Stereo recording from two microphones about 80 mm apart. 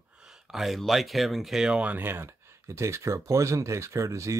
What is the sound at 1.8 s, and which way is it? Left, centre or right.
Speech, right.